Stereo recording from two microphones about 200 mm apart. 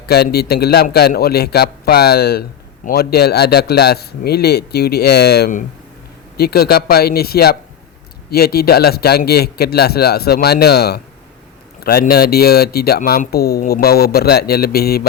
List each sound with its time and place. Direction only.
0.1 s a man's voice: 50° left (ahead or behind)